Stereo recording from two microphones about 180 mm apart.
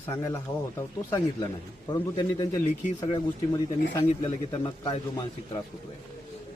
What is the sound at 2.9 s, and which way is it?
Speech, 35° left (ahead or behind).